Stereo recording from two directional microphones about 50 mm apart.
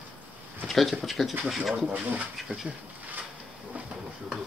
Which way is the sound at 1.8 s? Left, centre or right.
Right.